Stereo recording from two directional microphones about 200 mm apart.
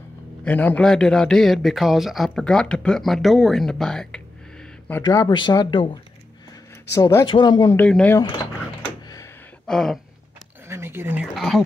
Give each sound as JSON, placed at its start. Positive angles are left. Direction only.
{"t": 0.5, "sound": "a man's voice", "side_deg": 10}
{"t": 5.0, "sound": "speech", "side_deg": 20}
{"t": 7.8, "sound": "speech", "side_deg": 5}
{"t": 9.7, "sound": "speech", "side_deg": 0}
{"t": 10.7, "sound": "a sound", "side_deg": -10}
{"t": 11.3, "sound": "a man's voice", "side_deg": 0}